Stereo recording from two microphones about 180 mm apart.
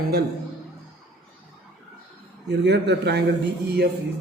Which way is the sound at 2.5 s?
70° right (ahead or behind).